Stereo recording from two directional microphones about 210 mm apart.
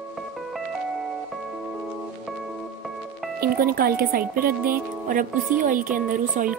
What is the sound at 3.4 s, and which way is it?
A woman's voice, 45° right (ahead or behind).